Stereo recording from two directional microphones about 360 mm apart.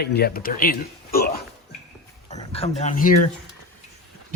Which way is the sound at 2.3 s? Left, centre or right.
Centre.